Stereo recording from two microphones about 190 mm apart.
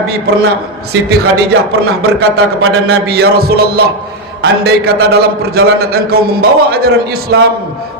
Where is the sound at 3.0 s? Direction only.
55° right (ahead or behind).